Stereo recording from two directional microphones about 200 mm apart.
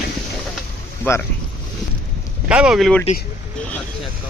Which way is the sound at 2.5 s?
5° right (ahead or behind).